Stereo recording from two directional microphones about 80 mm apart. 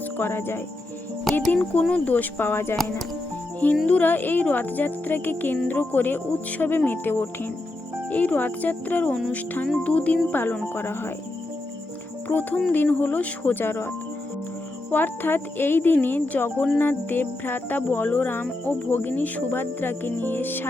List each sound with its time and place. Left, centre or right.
0.2 s speech: left
1.2 s speech: centre
1.8 s speech: centre
3.8 s speech: centre
12.3 s speech: left
14.8 s speech: left